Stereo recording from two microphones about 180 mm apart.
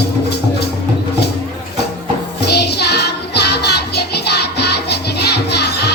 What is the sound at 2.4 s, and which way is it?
Music, 65° left (ahead or behind).